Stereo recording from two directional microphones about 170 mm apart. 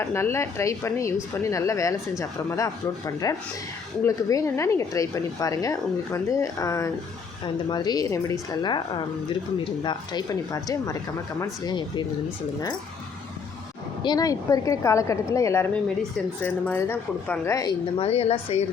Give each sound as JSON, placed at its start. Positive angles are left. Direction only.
{"t": 0.0, "sound": "a woman's voice", "side_deg": 15}
{"t": 14.0, "sound": "a woman's voice", "side_deg": 25}